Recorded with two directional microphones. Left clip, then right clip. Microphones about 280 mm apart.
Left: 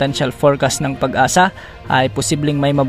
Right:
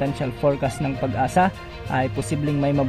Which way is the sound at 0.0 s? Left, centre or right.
Left.